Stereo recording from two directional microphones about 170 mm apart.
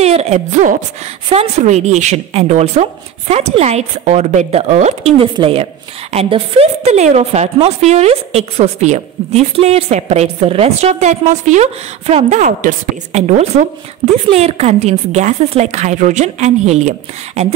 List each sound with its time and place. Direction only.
0.0 s a woman's voice: 40° right (ahead or behind)